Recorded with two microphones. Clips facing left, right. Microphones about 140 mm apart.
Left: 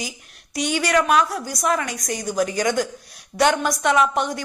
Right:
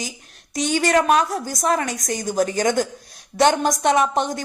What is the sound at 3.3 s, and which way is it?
Speech, 25° left (ahead or behind).